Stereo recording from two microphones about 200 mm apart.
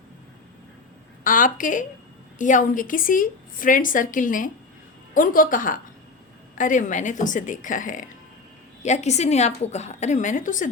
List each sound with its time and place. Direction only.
1.2 s a woman's voice: 40° left (ahead or behind)